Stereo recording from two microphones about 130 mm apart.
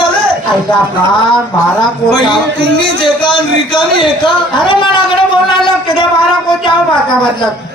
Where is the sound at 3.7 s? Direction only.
35° left (ahead or behind).